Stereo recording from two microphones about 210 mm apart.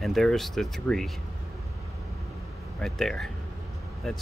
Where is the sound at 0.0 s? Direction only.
Centre (ahead or behind).